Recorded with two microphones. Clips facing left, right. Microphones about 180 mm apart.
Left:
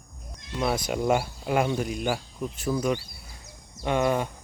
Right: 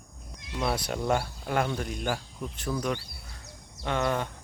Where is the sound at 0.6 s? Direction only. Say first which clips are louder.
Left 3 dB; 5° left (ahead or behind).